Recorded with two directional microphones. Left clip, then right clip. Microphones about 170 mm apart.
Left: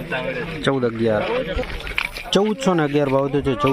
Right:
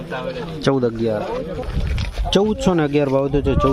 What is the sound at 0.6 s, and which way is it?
Speech, 20° right (ahead or behind).